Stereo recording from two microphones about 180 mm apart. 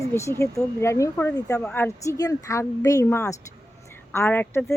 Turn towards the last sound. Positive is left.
turn(degrees=10)  # may be behind; listen again after turning